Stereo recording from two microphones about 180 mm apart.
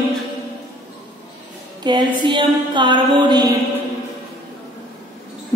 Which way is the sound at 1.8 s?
25° right (ahead or behind).